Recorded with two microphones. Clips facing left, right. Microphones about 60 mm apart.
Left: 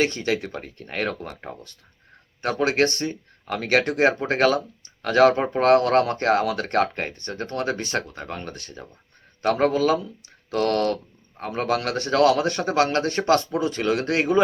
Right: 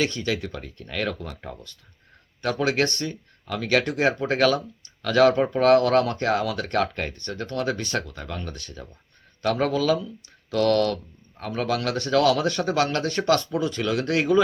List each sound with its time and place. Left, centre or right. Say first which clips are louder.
0.0 s speech: left 2 dB; left
2.4 s speech: left 2 dB; left